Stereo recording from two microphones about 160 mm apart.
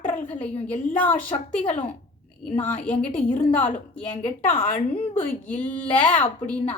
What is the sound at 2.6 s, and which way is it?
A woman's voice, 10° left (ahead or behind).